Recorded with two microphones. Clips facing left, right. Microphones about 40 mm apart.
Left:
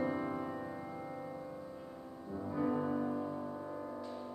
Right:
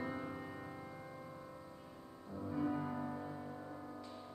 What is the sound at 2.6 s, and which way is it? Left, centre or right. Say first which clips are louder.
Music: left 4 dB; left.